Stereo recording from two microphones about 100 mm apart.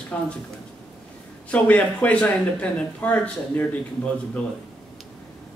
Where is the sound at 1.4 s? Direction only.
15° left (ahead or behind).